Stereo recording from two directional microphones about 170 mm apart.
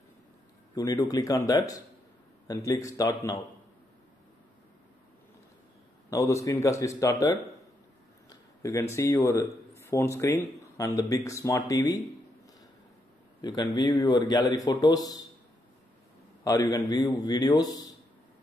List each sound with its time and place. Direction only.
0.7 s a man's voice: 20° left (ahead or behind)
2.4 s a man's voice: 20° left (ahead or behind)
6.0 s a man's voice: 20° left (ahead or behind)
13.4 s a man's voice: 25° left (ahead or behind)
16.4 s a man's voice: 20° left (ahead or behind)